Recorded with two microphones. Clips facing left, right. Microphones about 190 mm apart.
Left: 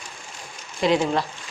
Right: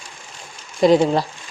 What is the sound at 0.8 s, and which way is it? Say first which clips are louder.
Speech: right 7 dB; 40° right (ahead or behind).